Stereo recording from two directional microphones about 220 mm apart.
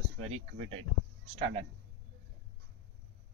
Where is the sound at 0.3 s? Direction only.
30° right (ahead or behind).